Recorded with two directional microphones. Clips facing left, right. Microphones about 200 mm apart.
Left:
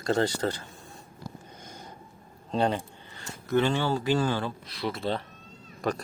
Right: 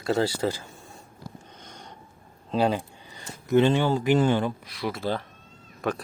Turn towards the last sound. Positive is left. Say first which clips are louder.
# right 1 dB
turn(degrees=0)  # may be behind; listen again after turning